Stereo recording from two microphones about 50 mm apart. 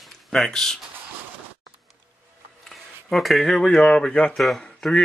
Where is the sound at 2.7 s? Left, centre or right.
Centre.